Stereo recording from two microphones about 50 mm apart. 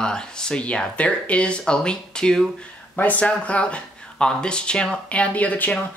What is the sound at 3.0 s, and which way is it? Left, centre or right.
Speech, left.